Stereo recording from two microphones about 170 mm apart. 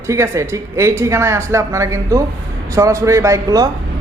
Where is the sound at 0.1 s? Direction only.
15° right (ahead or behind).